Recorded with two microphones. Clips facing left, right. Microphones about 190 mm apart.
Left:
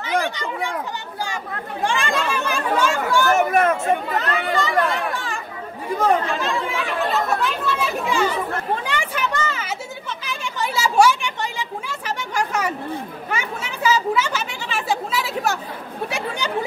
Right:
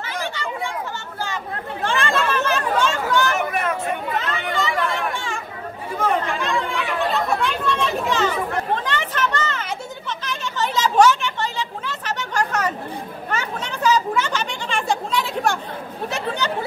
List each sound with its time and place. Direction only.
1.2 s chatter: 15° left (ahead or behind)
3.3 s chatter: 45° left (ahead or behind)
4.2 s chatter: centre (ahead or behind)
8.7 s a sound: 10° left (ahead or behind)
13.3 s chatter: 10° left (ahead or behind)